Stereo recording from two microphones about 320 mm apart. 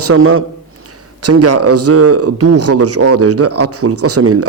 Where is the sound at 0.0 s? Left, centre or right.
Right.